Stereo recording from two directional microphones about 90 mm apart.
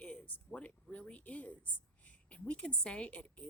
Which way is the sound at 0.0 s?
15° left (ahead or behind).